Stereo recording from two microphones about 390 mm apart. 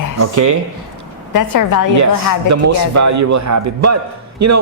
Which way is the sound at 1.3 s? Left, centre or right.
Left.